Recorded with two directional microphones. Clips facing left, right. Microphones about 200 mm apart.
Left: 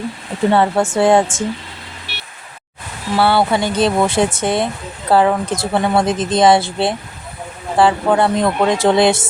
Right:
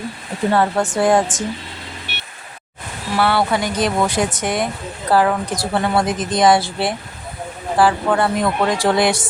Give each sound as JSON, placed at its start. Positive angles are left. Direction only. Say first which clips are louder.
{"t": 0.5, "sound": "speech", "louder": "left 2 dB", "side_deg": 25}
{"t": 3.2, "sound": "speech", "louder": "left 3 dB", "side_deg": 25}